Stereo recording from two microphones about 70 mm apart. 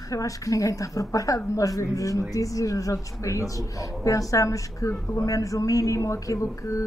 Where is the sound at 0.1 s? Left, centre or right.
Left.